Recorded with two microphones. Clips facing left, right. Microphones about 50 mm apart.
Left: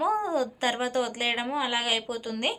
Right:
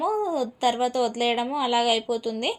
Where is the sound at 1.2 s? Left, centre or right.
Left.